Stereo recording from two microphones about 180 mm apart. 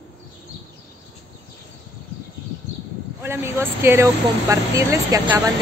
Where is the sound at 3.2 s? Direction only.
15° right (ahead or behind).